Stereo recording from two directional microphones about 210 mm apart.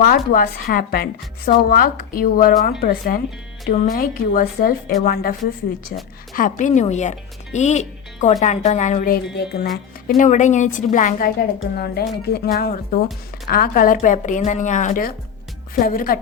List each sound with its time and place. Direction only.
0.0 s speech: 45° left (ahead or behind)
6.3 s speech: 40° left (ahead or behind)
10.2 s speech: 35° left (ahead or behind)
11.3 s speech: 50° left (ahead or behind)